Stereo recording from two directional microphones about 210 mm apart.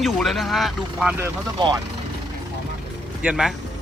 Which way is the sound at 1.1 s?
15° right (ahead or behind).